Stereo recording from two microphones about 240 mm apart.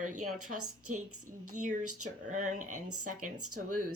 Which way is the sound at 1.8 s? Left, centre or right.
Right.